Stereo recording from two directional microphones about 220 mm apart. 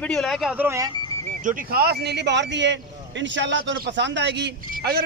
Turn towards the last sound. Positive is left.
turn(degrees=-45)  # may be behind; listen again after turning